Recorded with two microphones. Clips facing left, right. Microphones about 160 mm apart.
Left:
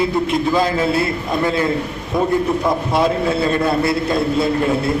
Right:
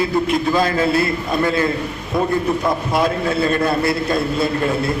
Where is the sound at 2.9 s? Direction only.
25° left (ahead or behind).